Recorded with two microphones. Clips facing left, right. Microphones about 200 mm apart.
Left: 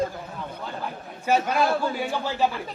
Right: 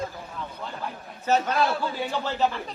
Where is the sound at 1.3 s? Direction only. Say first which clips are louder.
Left 1 dB; 10° left (ahead or behind).